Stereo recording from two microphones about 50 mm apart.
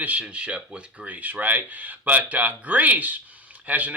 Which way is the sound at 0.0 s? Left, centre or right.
Right.